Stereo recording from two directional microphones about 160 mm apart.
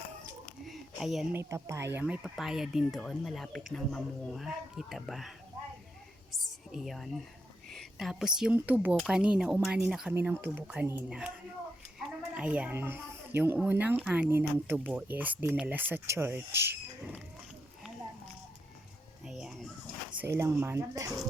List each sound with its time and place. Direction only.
0.6 s a sound: centre (ahead or behind)
1.3 s a child's voice: 15° right (ahead or behind)
2.2 s speech: centre (ahead or behind)
6.4 s a sound: centre (ahead or behind)
7.7 s a child's voice: centre (ahead or behind); by 17.2 s 15° right (ahead or behind)
19.2 s music: 5° right (ahead or behind)
20.3 s a child's voice: 15° right (ahead or behind)